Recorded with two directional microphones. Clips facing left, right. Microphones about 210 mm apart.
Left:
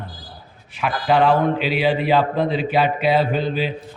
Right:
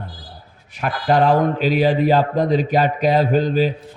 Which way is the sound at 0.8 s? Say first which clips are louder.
Right 1 dB; 45° right (ahead or behind).